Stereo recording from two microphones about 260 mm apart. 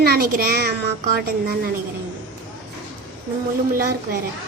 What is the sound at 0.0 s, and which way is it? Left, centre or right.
Speech, right.